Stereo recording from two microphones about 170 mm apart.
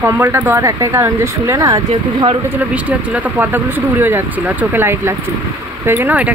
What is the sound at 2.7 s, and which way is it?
Speech, 10° right (ahead or behind).